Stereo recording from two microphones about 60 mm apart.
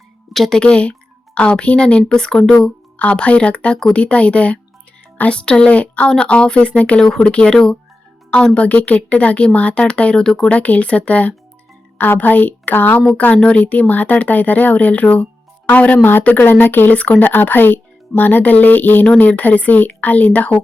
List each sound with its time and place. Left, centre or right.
0.3 s speech: centre
10.5 s a woman's voice: left